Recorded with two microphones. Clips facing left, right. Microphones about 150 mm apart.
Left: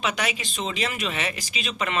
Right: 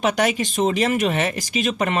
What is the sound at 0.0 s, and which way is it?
Speech, 50° right (ahead or behind).